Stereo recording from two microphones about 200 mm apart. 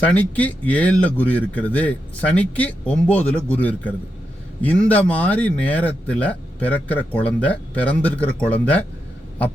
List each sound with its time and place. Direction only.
0.0 s speech: 10° left (ahead or behind)